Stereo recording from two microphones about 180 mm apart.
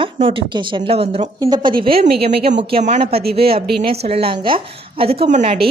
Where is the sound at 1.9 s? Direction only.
55° right (ahead or behind).